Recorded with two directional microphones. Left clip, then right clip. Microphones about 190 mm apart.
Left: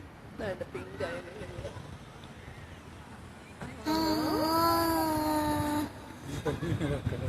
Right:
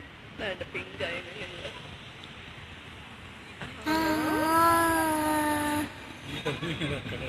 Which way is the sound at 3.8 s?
15° right (ahead or behind).